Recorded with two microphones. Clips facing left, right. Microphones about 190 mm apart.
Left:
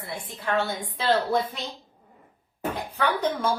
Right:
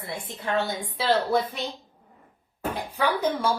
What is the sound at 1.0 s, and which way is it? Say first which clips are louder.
Speech: even; centre (ahead or behind).